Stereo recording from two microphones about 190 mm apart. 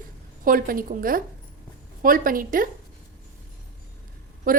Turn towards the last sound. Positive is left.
turn(degrees=-50)  # may be behind; listen again after turning